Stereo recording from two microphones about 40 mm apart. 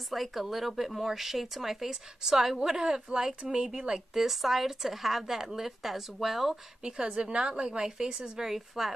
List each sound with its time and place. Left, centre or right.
0.1 s speech: centre; by 4.0 s right
4.1 s speech: centre
7.2 s speech: right